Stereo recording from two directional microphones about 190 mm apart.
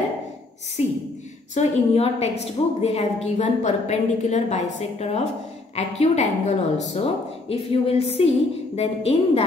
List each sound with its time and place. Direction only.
1.5 s a woman's voice: 35° left (ahead or behind)